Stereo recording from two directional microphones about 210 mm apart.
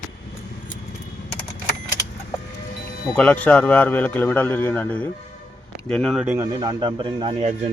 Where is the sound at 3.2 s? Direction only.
5° left (ahead or behind); by 7.5 s 25° right (ahead or behind).